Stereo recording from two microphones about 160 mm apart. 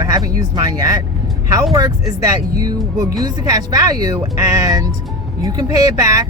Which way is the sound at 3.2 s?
25° right (ahead or behind).